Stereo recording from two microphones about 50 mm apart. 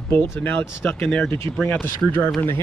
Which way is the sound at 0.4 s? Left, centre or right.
Left.